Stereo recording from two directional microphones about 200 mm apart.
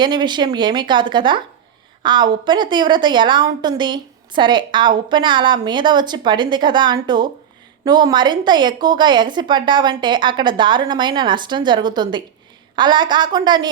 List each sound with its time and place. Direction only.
0.0 s a woman's voice: 20° right (ahead or behind)